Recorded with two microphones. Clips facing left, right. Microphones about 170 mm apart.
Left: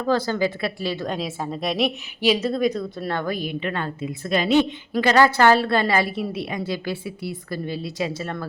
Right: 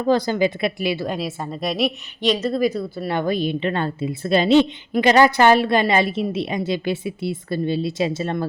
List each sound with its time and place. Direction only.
0.0 s a woman's voice: 15° right (ahead or behind)
3.1 s a woman's voice: 20° right (ahead or behind)